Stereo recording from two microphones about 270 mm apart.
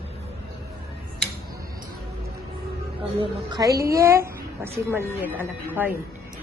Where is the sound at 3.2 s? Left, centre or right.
Centre.